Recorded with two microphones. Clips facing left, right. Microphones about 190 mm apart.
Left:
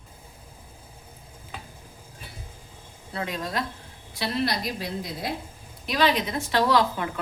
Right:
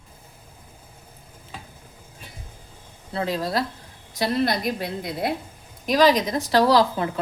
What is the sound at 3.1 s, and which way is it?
Speech, 35° right (ahead or behind).